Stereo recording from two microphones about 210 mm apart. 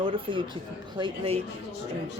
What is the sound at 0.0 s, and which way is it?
Speech, 25° right (ahead or behind).